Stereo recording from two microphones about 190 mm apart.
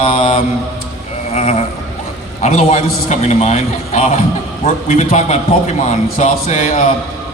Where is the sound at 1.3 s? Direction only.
40° left (ahead or behind).